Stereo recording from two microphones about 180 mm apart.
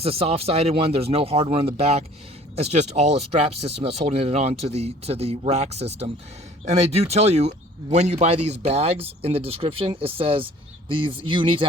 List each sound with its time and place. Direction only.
0.0 s speech: 35° right (ahead or behind)